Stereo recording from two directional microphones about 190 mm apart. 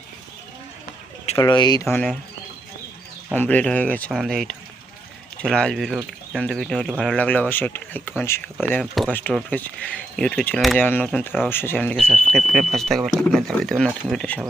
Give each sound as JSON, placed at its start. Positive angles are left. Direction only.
{"t": 1.4, "sound": "speech", "side_deg": 20}
{"t": 3.3, "sound": "speech", "side_deg": 10}